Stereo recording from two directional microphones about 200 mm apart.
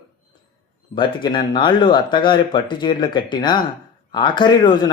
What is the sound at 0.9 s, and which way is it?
Speech, 25° left (ahead or behind).